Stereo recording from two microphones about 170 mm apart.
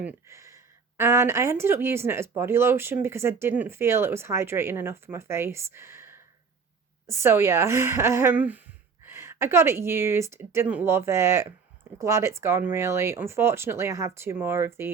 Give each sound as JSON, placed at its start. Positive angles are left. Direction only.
{"t": 0.0, "sound": "speech", "side_deg": -10}